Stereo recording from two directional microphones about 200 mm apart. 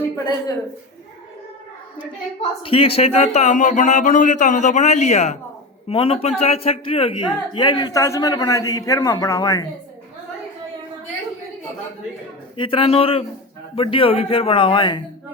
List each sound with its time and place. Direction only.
2.4 s a man's voice: 30° left (ahead or behind)
12.5 s a man's voice: 25° left (ahead or behind)